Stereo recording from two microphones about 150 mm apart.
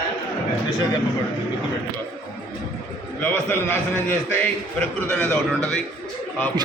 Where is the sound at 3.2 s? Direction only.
15° left (ahead or behind).